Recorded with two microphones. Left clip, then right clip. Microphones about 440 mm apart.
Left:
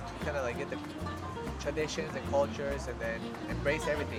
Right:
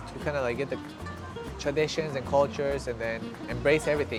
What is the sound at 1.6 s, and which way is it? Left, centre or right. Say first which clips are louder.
Speech: right 7 dB; right.